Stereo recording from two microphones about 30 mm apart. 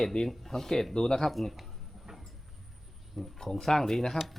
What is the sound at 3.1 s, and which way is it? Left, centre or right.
Speech, centre.